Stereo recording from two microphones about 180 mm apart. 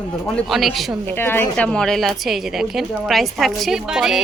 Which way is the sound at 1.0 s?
10° left (ahead or behind).